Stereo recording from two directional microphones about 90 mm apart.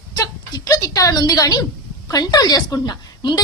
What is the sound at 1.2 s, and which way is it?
A woman's voice, 50° left (ahead or behind).